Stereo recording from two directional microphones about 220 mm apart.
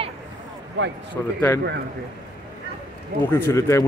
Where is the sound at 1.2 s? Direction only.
10° left (ahead or behind).